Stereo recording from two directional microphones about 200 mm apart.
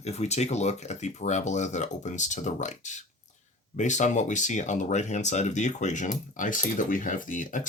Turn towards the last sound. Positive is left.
turn(degrees=40)  # may be behind; listen again after turning